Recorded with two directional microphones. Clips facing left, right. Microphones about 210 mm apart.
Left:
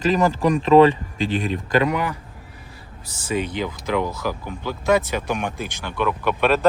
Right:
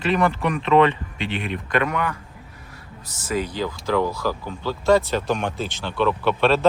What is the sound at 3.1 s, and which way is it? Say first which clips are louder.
Speech: left 1 dB; 30° left (ahead or behind).